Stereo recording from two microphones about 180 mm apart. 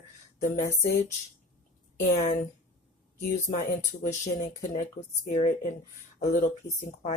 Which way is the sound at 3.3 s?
45° left (ahead or behind).